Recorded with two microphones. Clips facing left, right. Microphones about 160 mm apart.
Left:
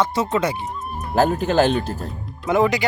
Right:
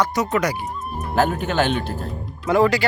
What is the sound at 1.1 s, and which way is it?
Speech, 35° left (ahead or behind).